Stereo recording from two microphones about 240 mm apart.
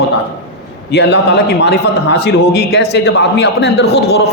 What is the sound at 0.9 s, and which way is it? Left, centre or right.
A man's voice, left.